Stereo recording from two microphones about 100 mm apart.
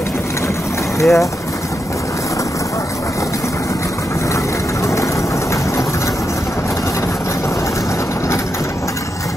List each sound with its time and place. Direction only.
0.9 s speech: 30° left (ahead or behind)